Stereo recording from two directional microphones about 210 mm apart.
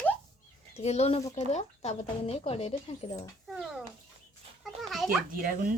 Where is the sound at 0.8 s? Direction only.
30° left (ahead or behind).